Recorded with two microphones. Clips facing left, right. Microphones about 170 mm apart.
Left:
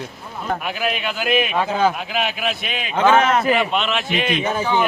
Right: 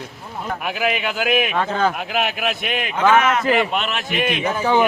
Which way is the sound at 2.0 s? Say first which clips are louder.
Right 1 dB; 55° right (ahead or behind).